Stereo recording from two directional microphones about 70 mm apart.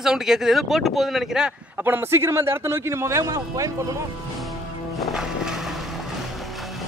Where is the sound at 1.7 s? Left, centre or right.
Right.